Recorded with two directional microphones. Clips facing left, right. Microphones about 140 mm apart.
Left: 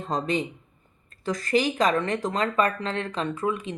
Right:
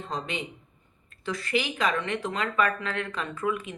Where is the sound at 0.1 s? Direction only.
40° left (ahead or behind).